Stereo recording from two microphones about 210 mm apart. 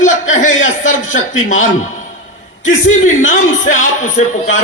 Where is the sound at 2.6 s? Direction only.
35° left (ahead or behind).